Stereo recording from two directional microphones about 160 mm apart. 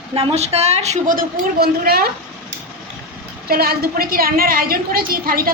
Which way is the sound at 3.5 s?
70° right (ahead or behind).